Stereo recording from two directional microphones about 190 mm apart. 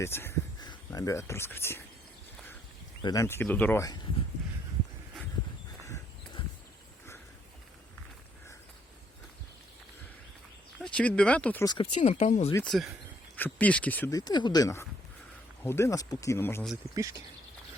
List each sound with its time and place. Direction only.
0.0 s a sound: 10° left (ahead or behind)
0.7 s speech: 20° left (ahead or behind)
3.0 s speech: 20° left (ahead or behind)
5.8 s a sound: 15° left (ahead or behind)
10.9 s speech: 5° left (ahead or behind)
11.6 s speech: 25° left (ahead or behind)
11.9 s speech: 40° left (ahead or behind)
12.6 s speech: centre (ahead or behind)
16.9 s speech: 15° right (ahead or behind)